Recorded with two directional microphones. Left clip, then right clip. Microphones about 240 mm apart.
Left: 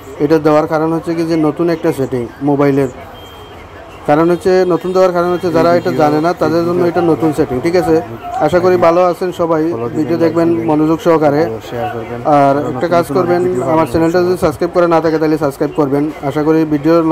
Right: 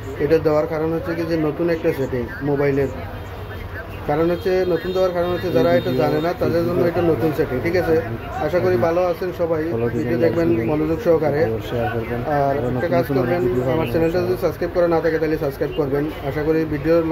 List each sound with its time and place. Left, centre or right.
0.3 s speech: left
4.1 s speech: left